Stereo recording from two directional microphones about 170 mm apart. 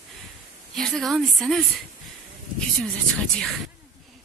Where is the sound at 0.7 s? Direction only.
Centre (ahead or behind).